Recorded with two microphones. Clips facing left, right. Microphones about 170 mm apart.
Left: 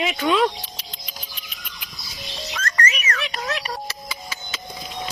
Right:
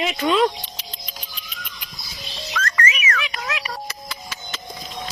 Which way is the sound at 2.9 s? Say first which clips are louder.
Right 1 dB; 35° left (ahead or behind).